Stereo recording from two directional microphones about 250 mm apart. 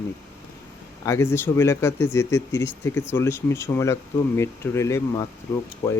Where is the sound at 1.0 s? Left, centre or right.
Centre.